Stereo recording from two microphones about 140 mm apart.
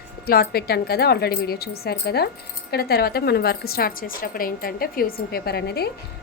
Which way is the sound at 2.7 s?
90° left.